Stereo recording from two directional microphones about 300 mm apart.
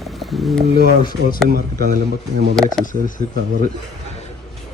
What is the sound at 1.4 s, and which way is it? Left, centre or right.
Speech, right.